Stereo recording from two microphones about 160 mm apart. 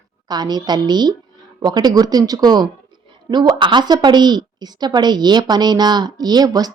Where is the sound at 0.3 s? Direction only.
25° right (ahead or behind).